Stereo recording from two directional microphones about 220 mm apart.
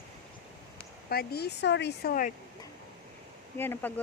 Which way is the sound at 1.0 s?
45° left (ahead or behind).